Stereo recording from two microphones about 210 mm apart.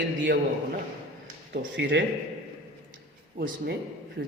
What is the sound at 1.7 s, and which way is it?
Speech, 60° right (ahead or behind).